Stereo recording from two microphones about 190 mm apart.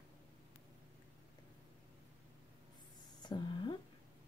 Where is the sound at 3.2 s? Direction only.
25° left (ahead or behind).